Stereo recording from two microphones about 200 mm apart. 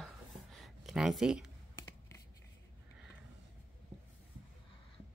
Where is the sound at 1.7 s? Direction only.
15° left (ahead or behind).